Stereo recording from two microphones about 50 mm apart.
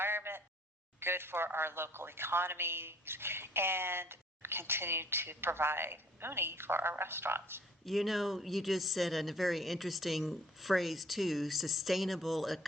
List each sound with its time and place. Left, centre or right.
0.0 s a sound: right
0.9 s speech: right
7.9 s speech: centre